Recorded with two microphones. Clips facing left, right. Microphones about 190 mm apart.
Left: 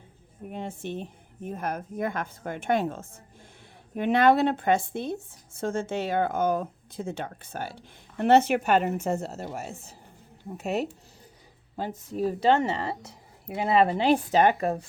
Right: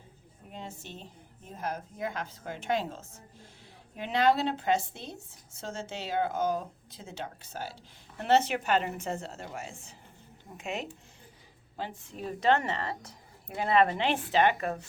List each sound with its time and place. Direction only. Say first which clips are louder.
0.5 s speech: left 9 dB; 60° left (ahead or behind)
9.0 s a woman's voice: left 7 dB; 40° left (ahead or behind)
13.1 s a sound: left 6 dB; 25° left (ahead or behind)
13.8 s a woman's voice: left 6 dB; 35° left (ahead or behind)